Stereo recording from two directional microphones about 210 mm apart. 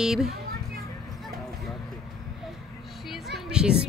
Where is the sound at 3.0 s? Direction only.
Centre (ahead or behind).